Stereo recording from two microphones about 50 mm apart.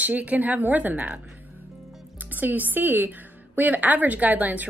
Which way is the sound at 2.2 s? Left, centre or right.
Right.